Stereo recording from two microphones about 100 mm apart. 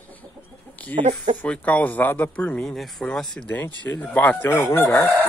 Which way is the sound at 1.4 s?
15° left (ahead or behind).